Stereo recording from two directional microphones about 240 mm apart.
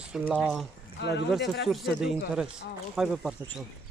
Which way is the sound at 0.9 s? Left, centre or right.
Left.